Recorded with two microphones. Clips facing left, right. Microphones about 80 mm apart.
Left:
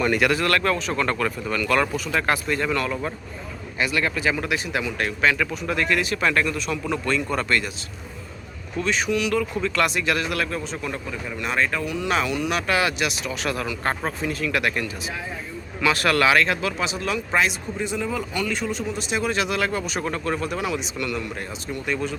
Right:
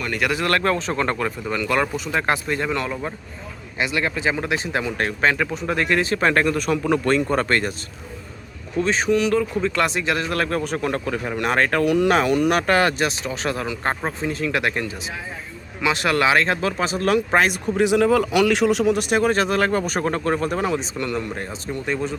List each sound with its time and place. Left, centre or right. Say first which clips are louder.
0.3 s a man's voice: right 1 dB; right
8.8 s a man's voice: right 4 dB; right
10.3 s a man's voice: right 4 dB; right
17.7 s a man's voice: right 12 dB; right